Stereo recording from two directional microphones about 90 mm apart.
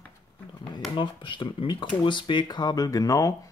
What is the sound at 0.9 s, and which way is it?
Speech, 65° left (ahead or behind).